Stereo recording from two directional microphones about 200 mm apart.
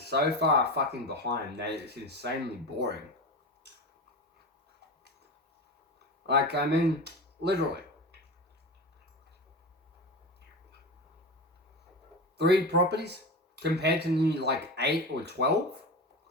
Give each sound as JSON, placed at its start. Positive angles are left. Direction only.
{"t": 0.1, "sound": "speech", "side_deg": -55}
{"t": 6.2, "sound": "speech", "side_deg": -55}
{"t": 12.4, "sound": "speech", "side_deg": -55}